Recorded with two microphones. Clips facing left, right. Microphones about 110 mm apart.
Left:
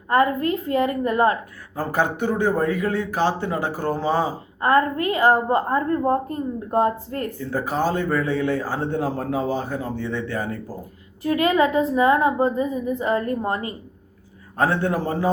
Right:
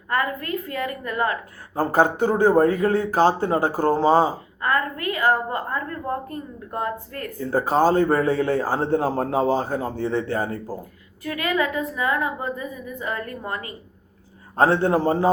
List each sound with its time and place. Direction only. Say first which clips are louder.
0.1 s a woman's voice: left 6 dB; 25° left (ahead or behind)
1.7 s a man's voice: right 4 dB; 40° right (ahead or behind)
4.6 s a woman's voice: left 5 dB; 30° left (ahead or behind)
7.5 s a man's voice: right 5 dB; 40° right (ahead or behind)
11.2 s a woman's voice: left 5 dB; 25° left (ahead or behind)
14.5 s a man's voice: right 3 dB; 30° right (ahead or behind)